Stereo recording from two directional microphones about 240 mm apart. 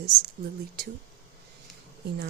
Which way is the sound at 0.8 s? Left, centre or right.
Right.